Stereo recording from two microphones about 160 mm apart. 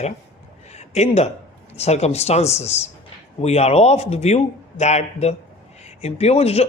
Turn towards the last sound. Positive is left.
turn(degrees=40)  # may be behind; listen again after turning